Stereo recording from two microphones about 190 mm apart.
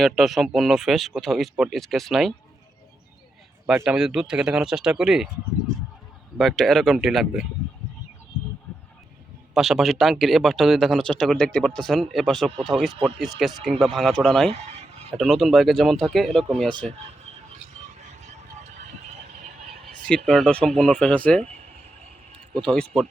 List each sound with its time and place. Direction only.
0.0 s speech: centre (ahead or behind)
3.8 s speech: 5° right (ahead or behind)
6.3 s speech: centre (ahead or behind)
9.6 s speech: centre (ahead or behind)
14.5 s a sound: 30° right (ahead or behind)
15.2 s speech: centre (ahead or behind)
20.1 s speech: 5° left (ahead or behind)
21.4 s a sound: 35° right (ahead or behind)
22.4 s a sound: 5° left (ahead or behind)